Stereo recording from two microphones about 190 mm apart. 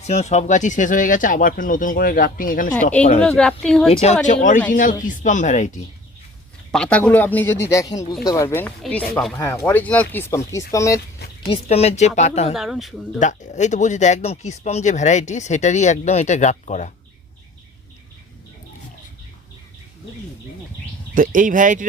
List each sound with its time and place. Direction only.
0.0 s speech: 35° left (ahead or behind)
3.0 s speech: 35° left (ahead or behind)
3.2 s a woman's voice: 5° left (ahead or behind)
4.7 s speech: 45° left (ahead or behind)
6.7 s speech: 5° left (ahead or behind)
11.4 s speech: 30° left (ahead or behind)
12.5 s a woman's voice: centre (ahead or behind)
13.1 s speech: 40° left (ahead or behind)
21.2 s speech: 45° right (ahead or behind)